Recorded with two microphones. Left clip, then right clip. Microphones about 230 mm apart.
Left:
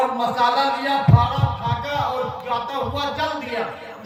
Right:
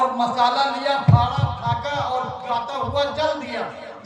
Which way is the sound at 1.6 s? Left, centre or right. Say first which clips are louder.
Right 3 dB; right.